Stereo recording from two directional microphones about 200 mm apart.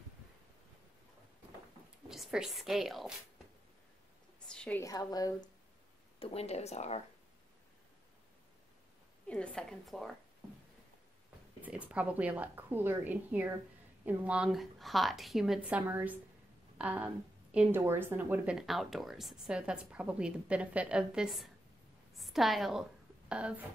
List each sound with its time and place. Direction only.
2.0 s speech: centre (ahead or behind)
4.5 s a woman's voice: 5° left (ahead or behind)
6.1 s speech: 30° left (ahead or behind)
9.3 s a woman's voice: 5° left (ahead or behind)
11.6 s a woman's voice: 5° right (ahead or behind)